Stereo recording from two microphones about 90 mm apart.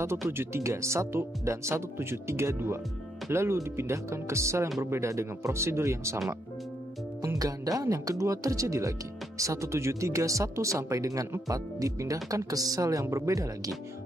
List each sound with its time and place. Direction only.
0.0 s speech: 30° right (ahead or behind)
7.3 s speech: 40° right (ahead or behind)